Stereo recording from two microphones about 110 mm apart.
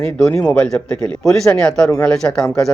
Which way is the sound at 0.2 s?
10° left (ahead or behind).